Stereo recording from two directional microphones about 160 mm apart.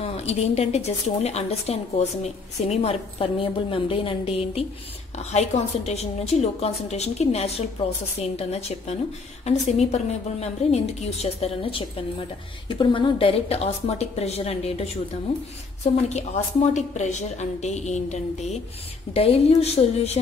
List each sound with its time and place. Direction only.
0.0 s a woman's voice: 40° left (ahead or behind)